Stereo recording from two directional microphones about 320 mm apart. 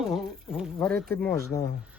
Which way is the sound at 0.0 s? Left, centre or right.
Centre.